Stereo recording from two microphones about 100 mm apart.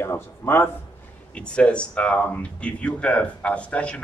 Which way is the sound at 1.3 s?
10° left (ahead or behind).